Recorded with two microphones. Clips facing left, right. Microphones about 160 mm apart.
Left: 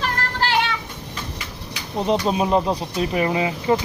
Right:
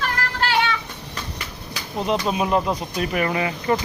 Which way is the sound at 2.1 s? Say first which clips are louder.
Left 2 dB; 30° left (ahead or behind).